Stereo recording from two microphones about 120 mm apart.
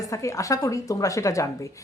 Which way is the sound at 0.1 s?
25° left (ahead or behind).